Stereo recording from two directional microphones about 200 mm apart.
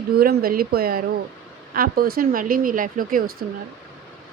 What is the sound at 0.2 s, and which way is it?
Speech, 50° right (ahead or behind).